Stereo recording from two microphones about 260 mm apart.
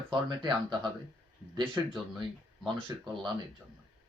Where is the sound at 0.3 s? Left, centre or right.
Centre.